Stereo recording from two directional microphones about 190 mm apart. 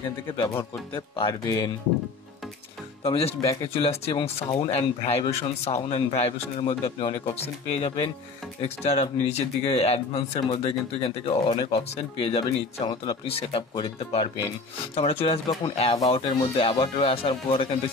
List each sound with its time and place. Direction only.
0.4 s speech: 15° left (ahead or behind)
3.0 s speech: 30° left (ahead or behind)